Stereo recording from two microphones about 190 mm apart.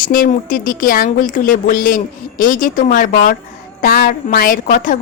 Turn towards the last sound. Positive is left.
turn(degrees=45)  # may be behind; listen again after turning